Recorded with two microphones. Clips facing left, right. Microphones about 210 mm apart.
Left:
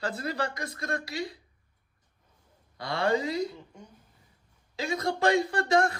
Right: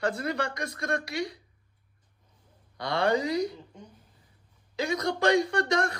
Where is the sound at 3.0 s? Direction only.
25° left (ahead or behind).